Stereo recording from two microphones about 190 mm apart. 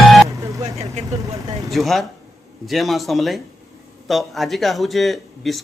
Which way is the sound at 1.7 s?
Centre (ahead or behind).